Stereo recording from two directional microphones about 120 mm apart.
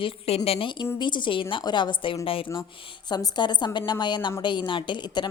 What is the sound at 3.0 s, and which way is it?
A woman's voice, 35° left (ahead or behind).